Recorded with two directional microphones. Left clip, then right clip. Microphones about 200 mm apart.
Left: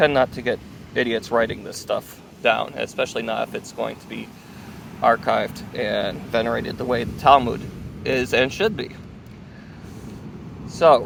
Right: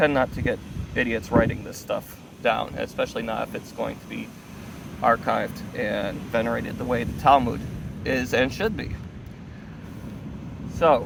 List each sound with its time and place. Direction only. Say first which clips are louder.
0.0 s speech: left 4 dB; 30° left (ahead or behind)
10.8 s speech: left 5 dB; 40° left (ahead or behind)